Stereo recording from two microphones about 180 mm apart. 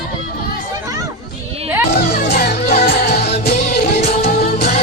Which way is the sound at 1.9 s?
65° left (ahead or behind).